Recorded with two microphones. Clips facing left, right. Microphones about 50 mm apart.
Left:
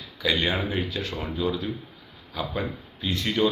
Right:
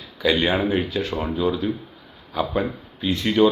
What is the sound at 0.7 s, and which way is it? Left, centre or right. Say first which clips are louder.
Speech: right 6 dB; right.